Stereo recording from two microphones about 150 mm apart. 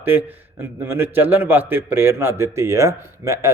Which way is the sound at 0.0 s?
10° right (ahead or behind).